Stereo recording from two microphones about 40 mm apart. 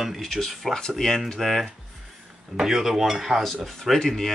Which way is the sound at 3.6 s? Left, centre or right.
Centre.